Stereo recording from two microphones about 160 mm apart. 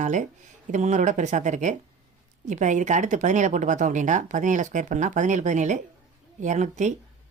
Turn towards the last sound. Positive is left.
turn(degrees=-45)  # may be behind; listen again after turning